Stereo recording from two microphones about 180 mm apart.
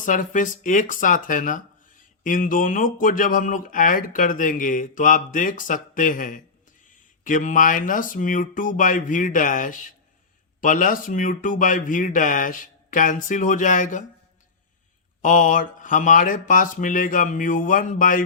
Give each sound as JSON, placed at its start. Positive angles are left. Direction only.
{"t": 0.0, "sound": "speech", "side_deg": 45}
{"t": 15.2, "sound": "speech", "side_deg": 45}